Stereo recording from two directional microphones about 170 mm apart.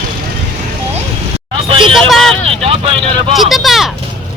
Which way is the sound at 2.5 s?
35° right (ahead or behind).